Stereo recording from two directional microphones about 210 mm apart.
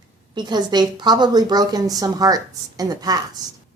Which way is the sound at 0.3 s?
20° right (ahead or behind).